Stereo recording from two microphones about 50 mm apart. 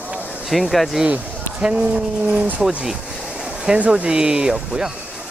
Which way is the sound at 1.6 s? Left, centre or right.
Right.